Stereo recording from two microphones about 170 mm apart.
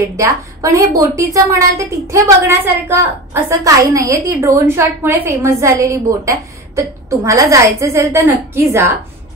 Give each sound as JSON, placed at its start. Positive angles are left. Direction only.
{"t": 0.2, "sound": "a woman's voice", "side_deg": -20}